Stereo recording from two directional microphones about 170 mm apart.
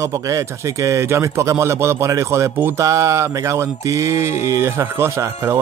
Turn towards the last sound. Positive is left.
turn(degrees=-15)  # may be behind; listen again after turning